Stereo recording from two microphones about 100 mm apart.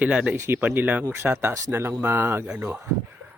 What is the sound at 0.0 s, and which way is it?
Speech, 10° right (ahead or behind).